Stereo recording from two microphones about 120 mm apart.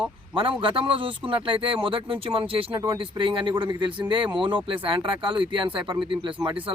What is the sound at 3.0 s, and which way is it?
Speech, 45° right (ahead or behind).